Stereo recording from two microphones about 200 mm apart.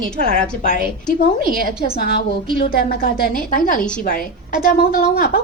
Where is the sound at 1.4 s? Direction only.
45° right (ahead or behind).